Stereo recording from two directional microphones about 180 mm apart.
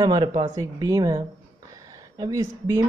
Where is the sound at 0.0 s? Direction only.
25° right (ahead or behind).